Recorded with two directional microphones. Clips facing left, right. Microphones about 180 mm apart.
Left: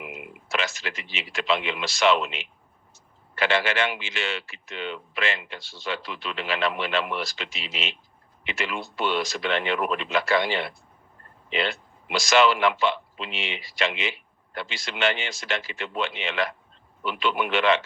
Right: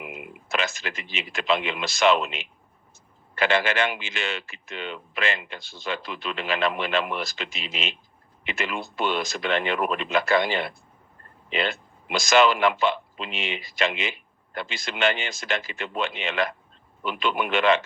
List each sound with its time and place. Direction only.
0.0 s speech: 45° right (ahead or behind)